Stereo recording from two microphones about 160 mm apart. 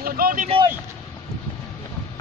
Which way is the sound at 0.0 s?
65° right (ahead or behind).